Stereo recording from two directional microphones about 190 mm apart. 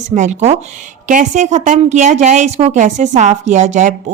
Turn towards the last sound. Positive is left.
turn(degrees=-40)  # may be behind; listen again after turning